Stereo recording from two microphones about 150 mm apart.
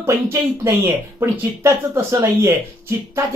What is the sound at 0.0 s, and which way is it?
Speech, 15° right (ahead or behind).